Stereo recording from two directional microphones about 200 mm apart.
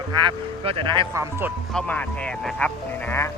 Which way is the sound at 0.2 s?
25° right (ahead or behind).